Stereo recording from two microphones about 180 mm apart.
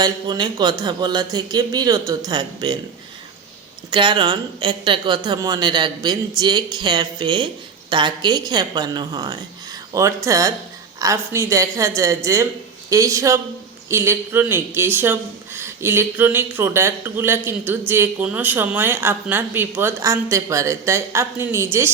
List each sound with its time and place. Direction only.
0.0 s speech: 25° right (ahead or behind)
3.9 s speech: 25° right (ahead or behind)